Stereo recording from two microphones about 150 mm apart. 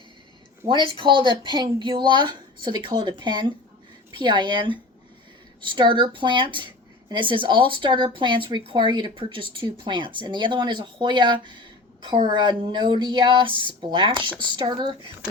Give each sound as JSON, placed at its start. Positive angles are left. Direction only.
{"t": 0.7, "sound": "speech", "side_deg": -35}